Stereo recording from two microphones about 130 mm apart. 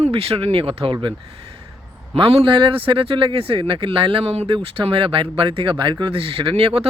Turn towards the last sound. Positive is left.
turn(degrees=-50)  # may be behind; listen again after turning